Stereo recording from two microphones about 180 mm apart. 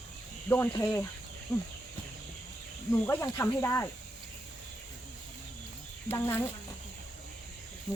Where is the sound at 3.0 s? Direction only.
15° left (ahead or behind).